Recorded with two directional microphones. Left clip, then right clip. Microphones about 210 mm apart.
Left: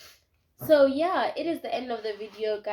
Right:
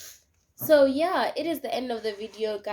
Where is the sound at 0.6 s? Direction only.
25° right (ahead or behind).